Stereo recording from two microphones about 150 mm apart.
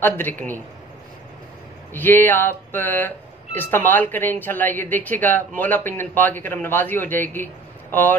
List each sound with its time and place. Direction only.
0.0 s speech: 10° left (ahead or behind)
2.0 s speech: 10° left (ahead or behind)